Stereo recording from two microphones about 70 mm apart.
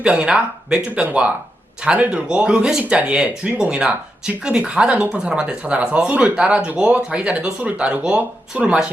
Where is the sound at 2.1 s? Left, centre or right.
Centre.